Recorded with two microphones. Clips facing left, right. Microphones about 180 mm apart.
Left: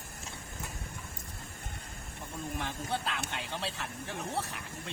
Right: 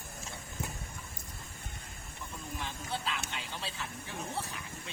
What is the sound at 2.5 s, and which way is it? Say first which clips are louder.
Speech: left 3 dB; 60° left (ahead or behind).